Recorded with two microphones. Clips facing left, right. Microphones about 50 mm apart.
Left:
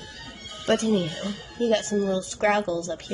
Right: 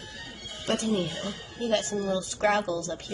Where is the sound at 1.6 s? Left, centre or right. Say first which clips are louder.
Left 4 dB; left.